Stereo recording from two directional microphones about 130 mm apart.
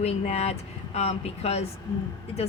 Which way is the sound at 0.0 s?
55° left (ahead or behind).